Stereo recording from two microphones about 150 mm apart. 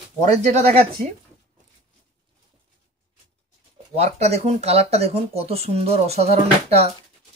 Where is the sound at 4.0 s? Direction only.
45° right (ahead or behind).